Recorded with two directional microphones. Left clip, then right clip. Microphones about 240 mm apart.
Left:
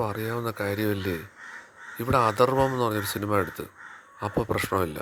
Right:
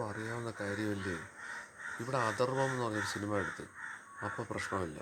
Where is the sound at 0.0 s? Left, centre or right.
Left.